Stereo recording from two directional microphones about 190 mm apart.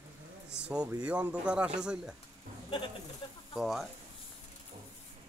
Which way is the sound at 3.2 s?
25° left (ahead or behind).